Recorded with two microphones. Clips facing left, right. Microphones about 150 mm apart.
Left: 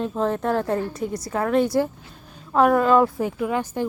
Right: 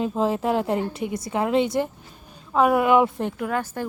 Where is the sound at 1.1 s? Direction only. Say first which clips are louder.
Left 1 dB; 20° right (ahead or behind).